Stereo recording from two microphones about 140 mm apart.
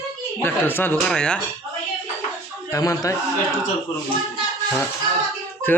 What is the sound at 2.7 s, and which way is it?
Speech, 20° left (ahead or behind).